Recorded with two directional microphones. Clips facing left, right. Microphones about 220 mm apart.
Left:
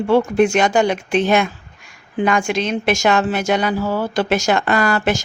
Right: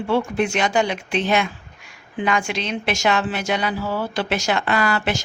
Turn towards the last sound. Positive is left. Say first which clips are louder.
# left 4 dB
turn(degrees=45)  # may be behind; listen again after turning